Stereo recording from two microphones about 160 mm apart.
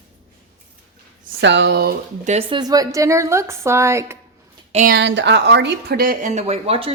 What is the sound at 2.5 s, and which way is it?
Speech, 25° right (ahead or behind).